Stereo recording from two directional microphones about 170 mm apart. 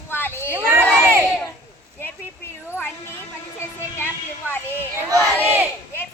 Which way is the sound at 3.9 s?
10° left (ahead or behind).